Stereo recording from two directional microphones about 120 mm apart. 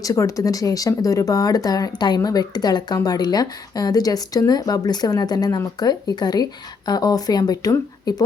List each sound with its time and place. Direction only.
0.0 s speech: 30° left (ahead or behind)